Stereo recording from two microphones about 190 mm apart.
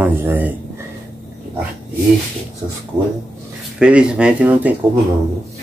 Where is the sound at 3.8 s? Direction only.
5° right (ahead or behind).